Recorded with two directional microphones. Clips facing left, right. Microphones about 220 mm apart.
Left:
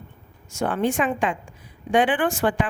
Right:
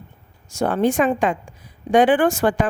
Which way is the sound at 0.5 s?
40° right (ahead or behind).